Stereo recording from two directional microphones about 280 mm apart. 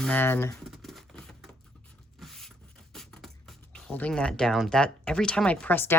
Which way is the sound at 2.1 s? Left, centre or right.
Centre.